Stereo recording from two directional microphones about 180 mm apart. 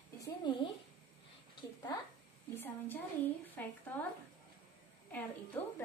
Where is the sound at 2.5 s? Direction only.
10° left (ahead or behind).